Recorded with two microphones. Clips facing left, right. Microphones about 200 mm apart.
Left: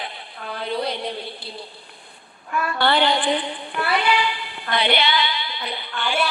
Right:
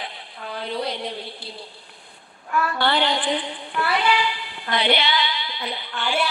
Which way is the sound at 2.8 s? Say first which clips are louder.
Left 5 dB; 60° left (ahead or behind).